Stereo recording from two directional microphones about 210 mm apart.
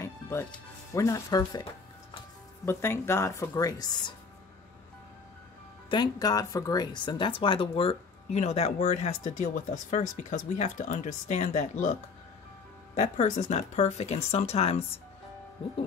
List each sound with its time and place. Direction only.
0.0 s speech: 10° left (ahead or behind)
5.9 s speech: 20° left (ahead or behind); by 11.9 s 35° left (ahead or behind)
12.9 s speech: 30° left (ahead or behind)